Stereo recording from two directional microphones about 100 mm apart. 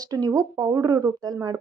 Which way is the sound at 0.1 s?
35° right (ahead or behind).